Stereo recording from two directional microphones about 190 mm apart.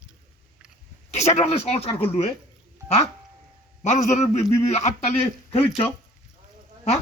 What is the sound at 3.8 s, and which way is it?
A man's voice, 40° left (ahead or behind).